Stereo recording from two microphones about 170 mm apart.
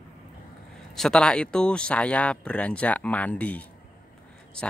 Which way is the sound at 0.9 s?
5° left (ahead or behind).